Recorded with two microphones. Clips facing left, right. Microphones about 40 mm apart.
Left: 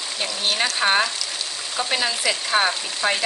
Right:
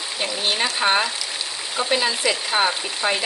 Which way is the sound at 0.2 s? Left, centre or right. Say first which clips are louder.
Right 1 dB; centre.